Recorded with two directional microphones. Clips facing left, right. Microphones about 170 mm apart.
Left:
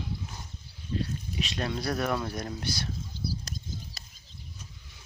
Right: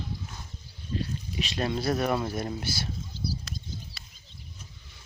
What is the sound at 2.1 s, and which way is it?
Speech, 25° right (ahead or behind).